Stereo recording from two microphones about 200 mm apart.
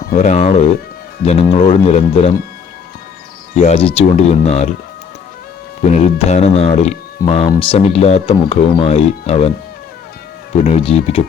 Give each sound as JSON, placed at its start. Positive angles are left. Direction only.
{"t": 0.1, "sound": "speech", "side_deg": 35}
{"t": 3.5, "sound": "speech", "side_deg": 30}
{"t": 5.8, "sound": "speech", "side_deg": 35}
{"t": 7.2, "sound": "speech", "side_deg": 15}
{"t": 7.9, "sound": "speech", "side_deg": 35}
{"t": 10.6, "sound": "speech", "side_deg": 30}